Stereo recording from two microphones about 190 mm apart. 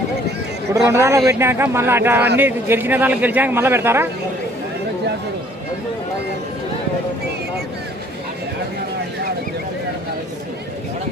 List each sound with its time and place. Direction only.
0.7 s a man's voice: 15° right (ahead or behind)